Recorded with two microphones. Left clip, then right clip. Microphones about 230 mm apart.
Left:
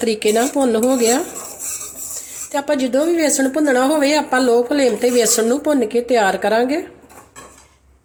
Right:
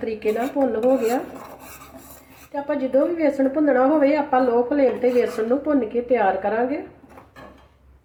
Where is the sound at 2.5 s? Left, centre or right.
Left.